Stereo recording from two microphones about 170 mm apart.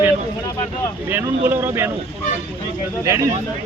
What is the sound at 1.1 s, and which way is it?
Speech, 10° right (ahead or behind).